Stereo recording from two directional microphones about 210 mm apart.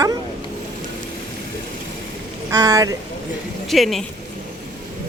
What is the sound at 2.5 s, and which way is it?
Speech, 15° right (ahead or behind).